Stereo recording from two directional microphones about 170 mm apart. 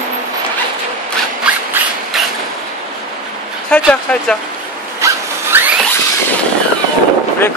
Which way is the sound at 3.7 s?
5° left (ahead or behind).